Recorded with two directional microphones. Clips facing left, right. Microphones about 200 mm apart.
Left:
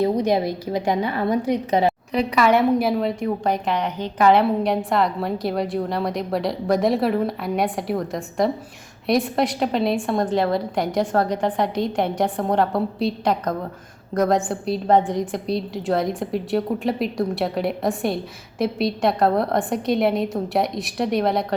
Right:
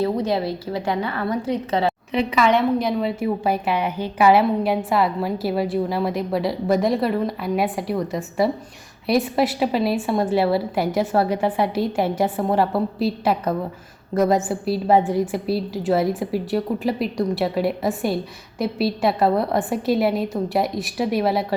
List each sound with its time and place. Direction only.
0.0 s a woman's voice: 15° left (ahead or behind)
2.1 s a woman's voice: centre (ahead or behind)